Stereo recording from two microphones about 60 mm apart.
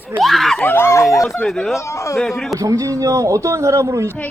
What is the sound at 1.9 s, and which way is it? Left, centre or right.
Speech, left.